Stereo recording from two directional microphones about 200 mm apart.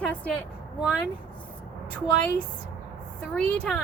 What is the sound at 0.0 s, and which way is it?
Speech, 5° left (ahead or behind).